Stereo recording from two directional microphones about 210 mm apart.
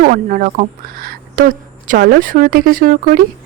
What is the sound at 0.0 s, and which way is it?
A woman's voice, 40° right (ahead or behind).